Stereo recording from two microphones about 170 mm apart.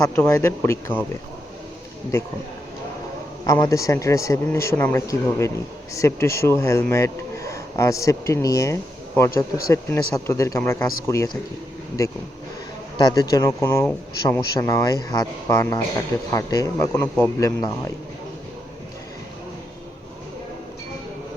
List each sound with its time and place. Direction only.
0.0 s a man's voice: 20° left (ahead or behind)
3.4 s a man's voice: 20° left (ahead or behind)
13.0 s a man's voice: 25° left (ahead or behind)